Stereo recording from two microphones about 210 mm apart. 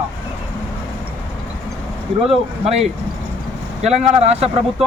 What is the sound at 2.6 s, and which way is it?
A man's voice, 30° right (ahead or behind).